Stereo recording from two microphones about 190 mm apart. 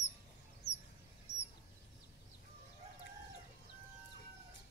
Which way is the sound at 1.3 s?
60° left (ahead or behind).